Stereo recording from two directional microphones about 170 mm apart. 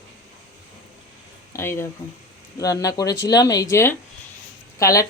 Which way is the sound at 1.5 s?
15° left (ahead or behind).